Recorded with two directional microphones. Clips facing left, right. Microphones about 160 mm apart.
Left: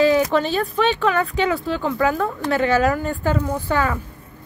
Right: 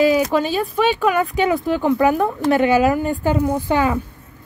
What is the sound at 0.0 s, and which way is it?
Speech, 10° right (ahead or behind).